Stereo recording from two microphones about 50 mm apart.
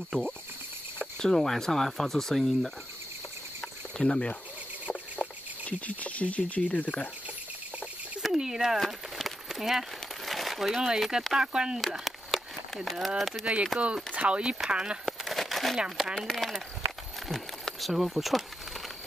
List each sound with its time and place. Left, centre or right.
0.1 s insect: centre
1.2 s speech: centre
4.0 s speech: centre
5.2 s speech: left
8.3 s speech: centre
8.8 s crumpling: centre
11.3 s speech: centre
12.0 s a sound: centre
13.5 s speech: right
15.0 s crumpling: centre
15.7 s speech: centre
16.2 s speech: centre
17.3 s a sound: centre